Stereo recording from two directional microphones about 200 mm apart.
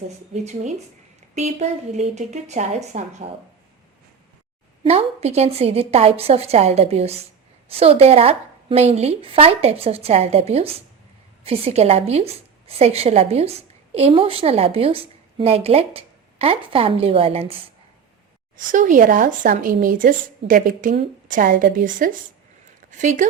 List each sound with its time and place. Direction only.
0.3 s speech: 35° right (ahead or behind)
4.8 s a woman's voice: 30° right (ahead or behind)
18.5 s speech: 40° right (ahead or behind)